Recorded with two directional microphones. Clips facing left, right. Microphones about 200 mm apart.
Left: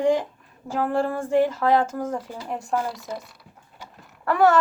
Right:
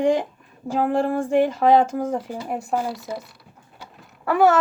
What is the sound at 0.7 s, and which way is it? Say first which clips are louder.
A woman's voice: right 3 dB; 20° right (ahead or behind).